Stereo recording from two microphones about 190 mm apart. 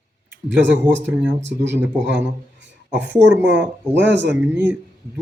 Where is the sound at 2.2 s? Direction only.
65° right (ahead or behind).